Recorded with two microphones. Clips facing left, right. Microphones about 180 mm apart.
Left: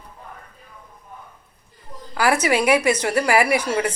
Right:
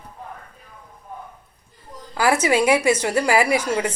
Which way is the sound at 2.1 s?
25° right (ahead or behind).